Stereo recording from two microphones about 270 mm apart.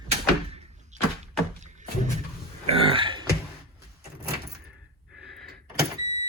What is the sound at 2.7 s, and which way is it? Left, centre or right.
Burping, centre.